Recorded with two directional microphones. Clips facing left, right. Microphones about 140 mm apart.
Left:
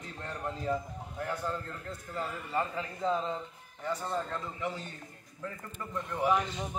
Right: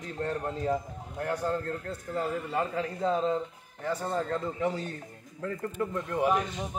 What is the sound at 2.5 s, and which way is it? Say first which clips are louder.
Speech: even; 55° right (ahead or behind).